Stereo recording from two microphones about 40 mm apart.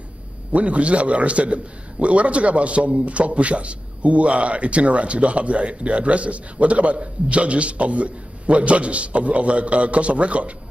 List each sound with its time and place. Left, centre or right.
0.5 s a man's voice: right